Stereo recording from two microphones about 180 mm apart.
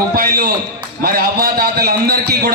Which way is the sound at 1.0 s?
55° right (ahead or behind).